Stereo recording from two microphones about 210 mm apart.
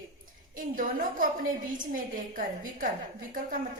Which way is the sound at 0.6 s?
40° right (ahead or behind).